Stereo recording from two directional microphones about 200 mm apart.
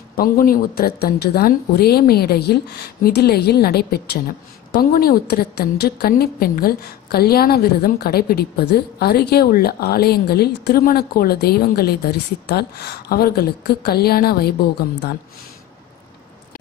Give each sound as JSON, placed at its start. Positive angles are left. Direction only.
{"t": 0.1, "sound": "a woman's voice", "side_deg": 45}